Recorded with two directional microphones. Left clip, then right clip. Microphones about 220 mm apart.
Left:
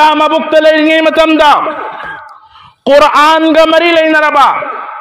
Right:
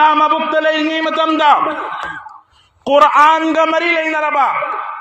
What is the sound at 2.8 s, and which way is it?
A man's voice, 45° left (ahead or behind).